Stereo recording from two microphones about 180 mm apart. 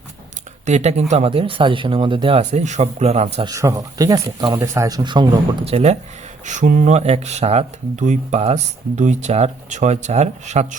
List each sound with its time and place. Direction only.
0.6 s speech: 40° right (ahead or behind)
3.4 s speech: 15° right (ahead or behind); by 10.8 s 40° right (ahead or behind)